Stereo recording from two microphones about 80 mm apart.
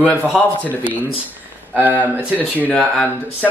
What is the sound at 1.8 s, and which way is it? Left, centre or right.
Speech, right.